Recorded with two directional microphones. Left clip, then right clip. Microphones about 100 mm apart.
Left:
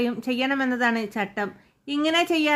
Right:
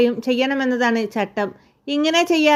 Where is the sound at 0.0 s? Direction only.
30° right (ahead or behind).